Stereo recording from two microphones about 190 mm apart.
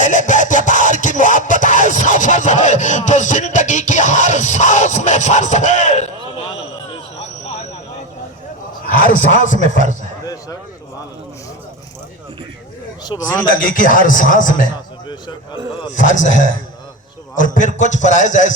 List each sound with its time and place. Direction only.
0.0 s music: 40° left (ahead or behind)
8.9 s a sound: 45° left (ahead or behind)
9.6 s a man's voice: 40° right (ahead or behind)
13.1 s a man's voice: 20° left (ahead or behind)
13.6 s speech: 45° left (ahead or behind)
16.0 s a man's voice: 40° left (ahead or behind)